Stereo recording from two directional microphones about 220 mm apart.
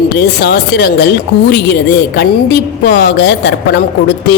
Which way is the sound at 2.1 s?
50° left (ahead or behind).